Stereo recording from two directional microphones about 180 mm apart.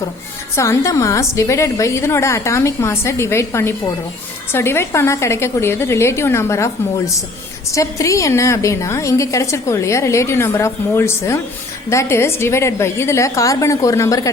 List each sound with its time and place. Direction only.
0.5 s a woman's voice: 15° left (ahead or behind)